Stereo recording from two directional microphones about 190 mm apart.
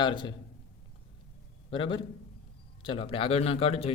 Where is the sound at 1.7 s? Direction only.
25° left (ahead or behind).